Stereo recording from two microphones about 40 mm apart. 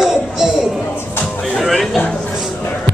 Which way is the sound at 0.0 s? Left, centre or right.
Centre.